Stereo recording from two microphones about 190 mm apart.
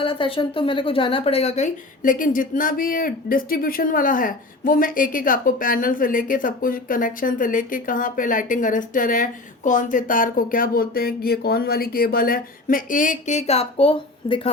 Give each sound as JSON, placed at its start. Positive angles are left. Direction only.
{"t": 0.0, "sound": "a woman's voice", "side_deg": 30}